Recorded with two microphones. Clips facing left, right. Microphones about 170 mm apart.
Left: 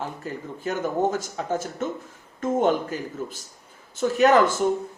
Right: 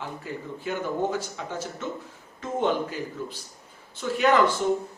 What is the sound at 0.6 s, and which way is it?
A man's voice, 45° left (ahead or behind).